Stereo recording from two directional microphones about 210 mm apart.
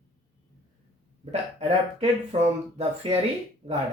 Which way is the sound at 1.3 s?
30° right (ahead or behind).